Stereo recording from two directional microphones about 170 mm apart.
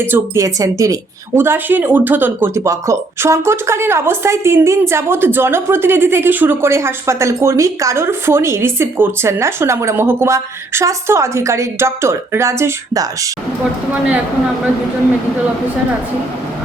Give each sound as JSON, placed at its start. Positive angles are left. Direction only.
{"t": 0.0, "sound": "speech", "side_deg": -15}
{"t": 13.9, "sound": "speech", "side_deg": -5}